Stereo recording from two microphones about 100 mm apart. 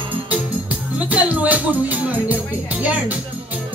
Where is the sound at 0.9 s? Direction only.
15° right (ahead or behind).